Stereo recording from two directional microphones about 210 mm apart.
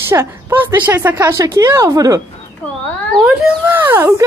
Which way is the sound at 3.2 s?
5° right (ahead or behind).